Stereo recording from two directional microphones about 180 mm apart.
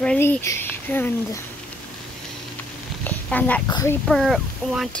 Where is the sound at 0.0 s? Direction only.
5° left (ahead or behind).